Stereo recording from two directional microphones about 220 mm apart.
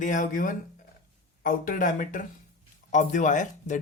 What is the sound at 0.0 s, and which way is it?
Speech, 35° left (ahead or behind).